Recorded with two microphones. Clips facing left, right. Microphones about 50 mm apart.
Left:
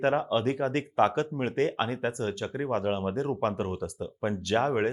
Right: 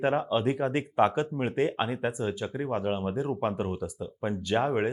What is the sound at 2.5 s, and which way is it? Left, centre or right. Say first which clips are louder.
Speech: left 2 dB; centre.